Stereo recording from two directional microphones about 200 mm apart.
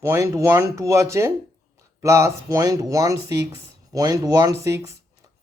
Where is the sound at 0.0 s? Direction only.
15° right (ahead or behind).